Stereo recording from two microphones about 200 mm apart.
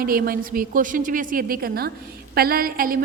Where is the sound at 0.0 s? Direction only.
45° right (ahead or behind).